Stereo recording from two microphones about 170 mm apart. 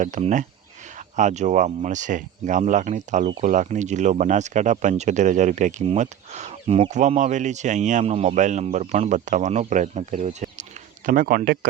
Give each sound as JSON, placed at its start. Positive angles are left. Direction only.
{"t": 0.0, "sound": "speech", "side_deg": -45}